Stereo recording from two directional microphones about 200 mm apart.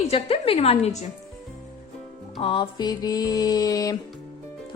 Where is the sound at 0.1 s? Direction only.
30° left (ahead or behind).